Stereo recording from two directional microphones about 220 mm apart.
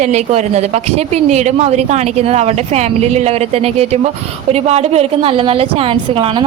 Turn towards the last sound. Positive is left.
turn(degrees=-25)  # may be behind; listen again after turning